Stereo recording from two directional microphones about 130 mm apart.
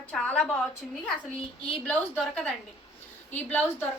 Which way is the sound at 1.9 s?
10° left (ahead or behind).